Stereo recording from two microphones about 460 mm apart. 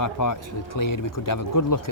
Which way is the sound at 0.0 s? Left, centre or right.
Left.